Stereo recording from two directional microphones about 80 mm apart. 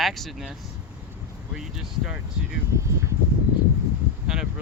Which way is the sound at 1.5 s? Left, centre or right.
Centre.